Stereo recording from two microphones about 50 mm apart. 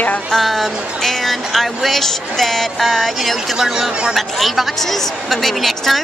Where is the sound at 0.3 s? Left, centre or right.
Centre.